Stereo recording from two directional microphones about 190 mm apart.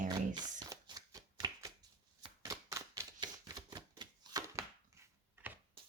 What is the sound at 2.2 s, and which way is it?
Typewriter, 20° right (ahead or behind).